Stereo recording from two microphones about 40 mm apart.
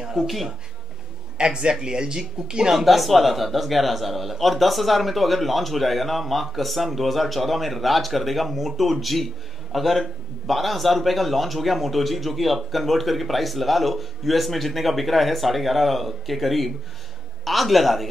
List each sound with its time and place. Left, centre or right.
0.1 s speech: centre
1.4 s speech: right
2.7 s a man's voice: centre